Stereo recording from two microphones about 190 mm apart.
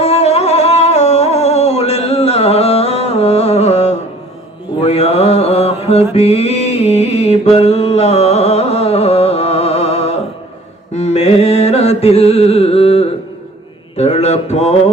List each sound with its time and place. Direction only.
0.0 s music: 35° left (ahead or behind)
13.9 s mantra: 35° left (ahead or behind)